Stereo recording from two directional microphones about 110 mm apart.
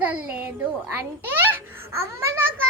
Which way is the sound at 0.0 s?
15° right (ahead or behind).